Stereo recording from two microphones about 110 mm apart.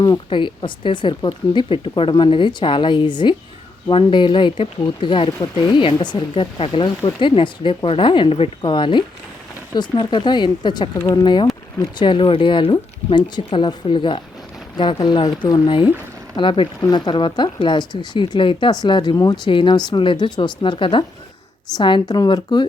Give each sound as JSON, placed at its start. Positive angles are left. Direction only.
{"t": 0.3, "sound": "speech", "side_deg": 50}
{"t": 15.6, "sound": "speech", "side_deg": 50}